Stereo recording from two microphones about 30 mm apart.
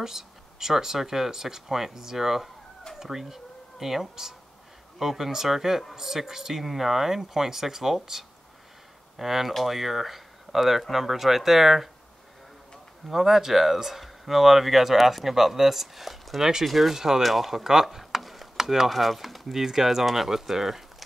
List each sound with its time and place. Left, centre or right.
0.0 s speech: centre
13.1 s speech: centre
17.9 s a sound: centre
18.6 s speech: centre
18.9 s speech: centre